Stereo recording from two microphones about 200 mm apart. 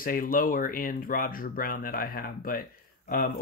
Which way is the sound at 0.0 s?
45° left (ahead or behind).